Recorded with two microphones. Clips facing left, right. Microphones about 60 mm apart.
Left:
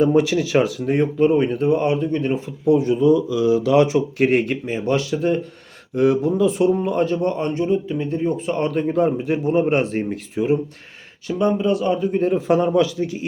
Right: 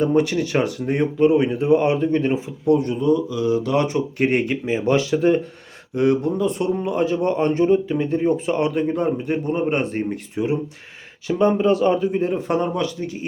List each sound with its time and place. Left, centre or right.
0.0 s speech: centre; by 2.3 s right
2.6 s speech: centre
3.9 s speech: centre
4.9 s speech: right
5.9 s speech: centre
7.2 s speech: right
8.5 s speech: centre
8.8 s speech: centre
11.3 s speech: right
12.1 s speech: centre